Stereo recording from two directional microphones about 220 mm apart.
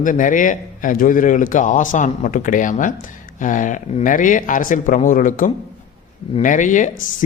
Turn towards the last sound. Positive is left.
turn(degrees=35)  # may be behind; listen again after turning